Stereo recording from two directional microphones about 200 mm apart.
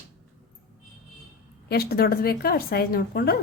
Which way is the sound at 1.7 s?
50° left (ahead or behind).